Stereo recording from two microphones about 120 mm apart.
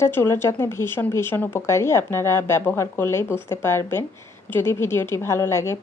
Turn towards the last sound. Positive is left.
turn(degrees=20)  # may be behind; listen again after turning